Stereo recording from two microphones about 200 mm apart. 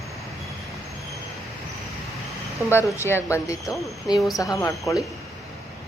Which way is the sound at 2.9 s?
15° left (ahead or behind).